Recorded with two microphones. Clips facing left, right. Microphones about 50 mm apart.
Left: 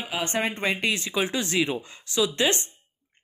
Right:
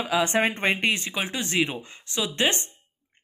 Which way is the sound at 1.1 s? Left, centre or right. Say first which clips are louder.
Left 1 dB; centre.